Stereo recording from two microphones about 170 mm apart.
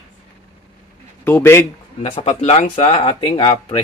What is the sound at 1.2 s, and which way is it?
Speech, 10° left (ahead or behind).